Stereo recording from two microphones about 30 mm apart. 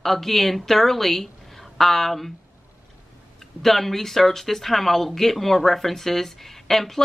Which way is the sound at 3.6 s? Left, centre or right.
Centre.